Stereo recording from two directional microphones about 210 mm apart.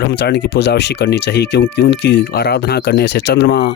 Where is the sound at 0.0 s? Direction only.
55° left (ahead or behind).